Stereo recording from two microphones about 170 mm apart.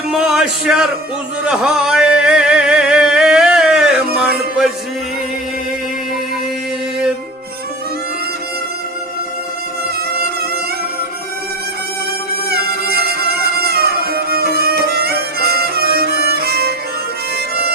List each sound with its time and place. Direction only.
0.1 s speech: 5° right (ahead or behind)
1.5 s a sound: 5° right (ahead or behind)
12.5 s music: 65° right (ahead or behind)